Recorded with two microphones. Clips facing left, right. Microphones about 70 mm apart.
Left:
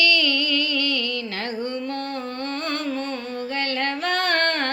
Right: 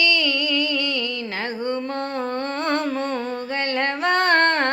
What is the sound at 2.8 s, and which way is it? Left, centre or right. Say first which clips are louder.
Music: right 3 dB; right.